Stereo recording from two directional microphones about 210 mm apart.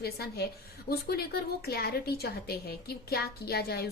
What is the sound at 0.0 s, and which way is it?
A woman's voice, 50° left (ahead or behind).